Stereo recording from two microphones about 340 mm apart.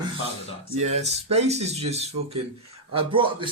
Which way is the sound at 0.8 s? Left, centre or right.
Centre.